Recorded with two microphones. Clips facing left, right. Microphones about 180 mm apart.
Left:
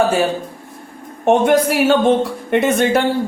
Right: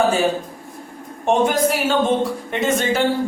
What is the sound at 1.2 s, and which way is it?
A woman's voice, 65° left (ahead or behind).